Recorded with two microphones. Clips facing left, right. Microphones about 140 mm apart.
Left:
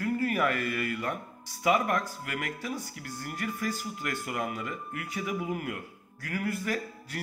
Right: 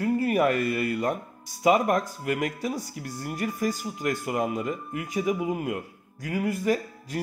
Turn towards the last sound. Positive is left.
turn(degrees=-20)  # may be behind; listen again after turning